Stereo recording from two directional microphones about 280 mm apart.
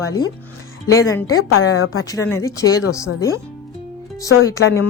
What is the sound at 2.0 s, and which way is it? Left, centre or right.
Speech, centre.